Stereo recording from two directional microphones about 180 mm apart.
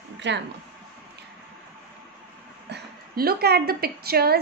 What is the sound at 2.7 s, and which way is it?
A woman's voice, 60° right (ahead or behind).